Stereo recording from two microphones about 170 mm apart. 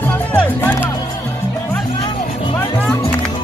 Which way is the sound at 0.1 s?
10° left (ahead or behind).